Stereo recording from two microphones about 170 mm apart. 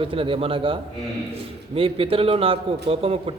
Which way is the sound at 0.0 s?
30° right (ahead or behind).